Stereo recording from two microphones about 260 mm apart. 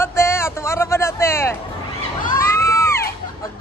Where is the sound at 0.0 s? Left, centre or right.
Centre.